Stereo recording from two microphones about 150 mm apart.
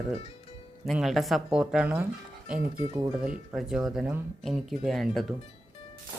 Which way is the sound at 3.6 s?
5° right (ahead or behind).